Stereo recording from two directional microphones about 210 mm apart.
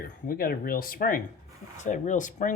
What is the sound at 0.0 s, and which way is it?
Speech, 45° left (ahead or behind).